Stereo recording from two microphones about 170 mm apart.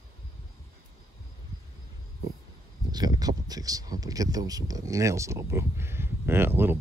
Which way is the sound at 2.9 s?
25° right (ahead or behind).